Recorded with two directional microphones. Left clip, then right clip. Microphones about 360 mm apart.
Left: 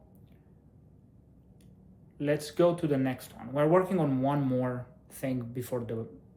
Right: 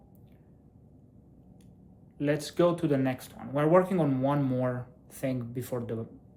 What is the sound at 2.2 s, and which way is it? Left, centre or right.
Speech, centre.